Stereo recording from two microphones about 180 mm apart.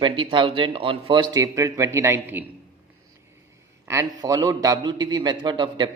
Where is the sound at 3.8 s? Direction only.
15° right (ahead or behind).